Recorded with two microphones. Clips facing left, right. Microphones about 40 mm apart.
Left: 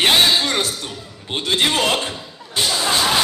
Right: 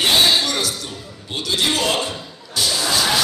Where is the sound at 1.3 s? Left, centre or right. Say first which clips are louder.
Left 2 dB; left.